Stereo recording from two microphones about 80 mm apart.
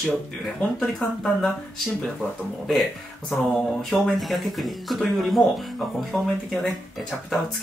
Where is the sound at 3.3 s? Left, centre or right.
Centre.